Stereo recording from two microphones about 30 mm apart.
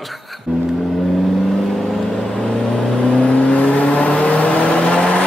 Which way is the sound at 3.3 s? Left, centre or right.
Left.